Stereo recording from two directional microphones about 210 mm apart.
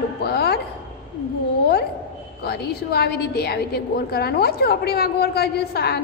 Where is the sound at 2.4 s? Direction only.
50° left (ahead or behind).